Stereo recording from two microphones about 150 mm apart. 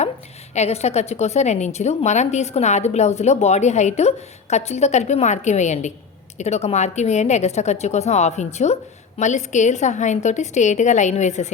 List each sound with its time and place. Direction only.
0.5 s a woman's voice: 45° left (ahead or behind)